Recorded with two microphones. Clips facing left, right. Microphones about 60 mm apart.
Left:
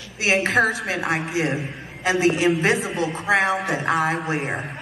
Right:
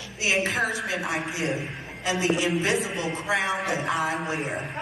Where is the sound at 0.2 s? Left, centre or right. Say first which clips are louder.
Left 6 dB; left.